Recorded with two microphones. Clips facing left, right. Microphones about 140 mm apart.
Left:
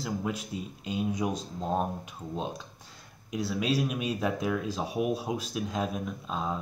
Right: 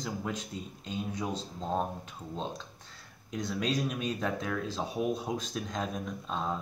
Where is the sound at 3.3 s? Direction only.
5° left (ahead or behind).